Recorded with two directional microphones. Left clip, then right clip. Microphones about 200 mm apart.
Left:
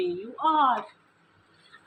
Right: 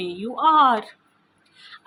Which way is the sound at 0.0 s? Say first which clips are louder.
Right 6 dB; 55° right (ahead or behind).